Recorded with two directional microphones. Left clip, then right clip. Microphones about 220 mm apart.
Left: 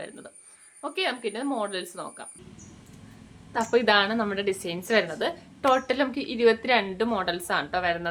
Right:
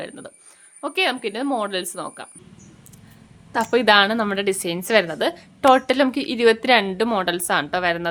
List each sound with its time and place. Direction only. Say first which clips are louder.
0.8 s a woman's voice: right 7 dB; 50° right (ahead or behind)
3.5 s a woman's voice: right 6 dB; 50° right (ahead or behind)